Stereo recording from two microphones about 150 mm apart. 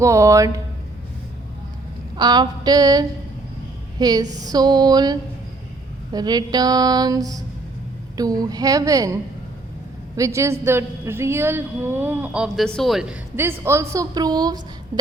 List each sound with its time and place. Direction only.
0.0 s speech: 20° right (ahead or behind)
2.1 s a woman's voice: 30° right (ahead or behind)
10.2 s a woman's voice: 20° right (ahead or behind); by 13.1 s centre (ahead or behind)
13.3 s speech: 15° right (ahead or behind)